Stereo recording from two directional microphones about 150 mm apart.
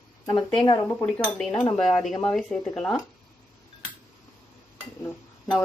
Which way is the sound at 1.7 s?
5° left (ahead or behind).